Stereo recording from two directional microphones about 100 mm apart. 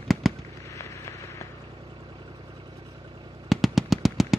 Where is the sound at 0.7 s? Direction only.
30° left (ahead or behind).